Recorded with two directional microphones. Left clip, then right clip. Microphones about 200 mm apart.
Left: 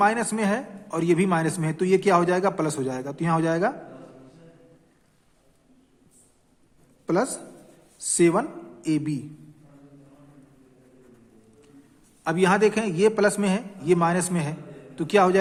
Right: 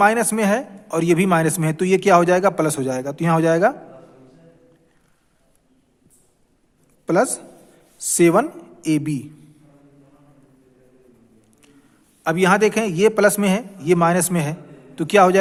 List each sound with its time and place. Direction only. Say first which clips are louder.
0.0 s a man's voice: right 6 dB; 35° right (ahead or behind)
7.0 s a man's voice: right 6 dB; 35° right (ahead or behind)
12.2 s a man's voice: right 4 dB; 35° right (ahead or behind)